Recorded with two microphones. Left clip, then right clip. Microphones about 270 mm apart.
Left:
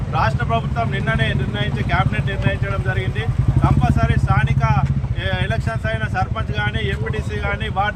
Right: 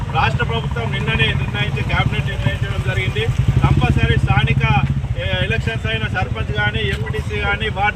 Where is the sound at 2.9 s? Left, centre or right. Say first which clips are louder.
Right 4 dB; centre.